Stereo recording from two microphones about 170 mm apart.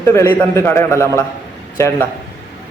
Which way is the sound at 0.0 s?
15° left (ahead or behind).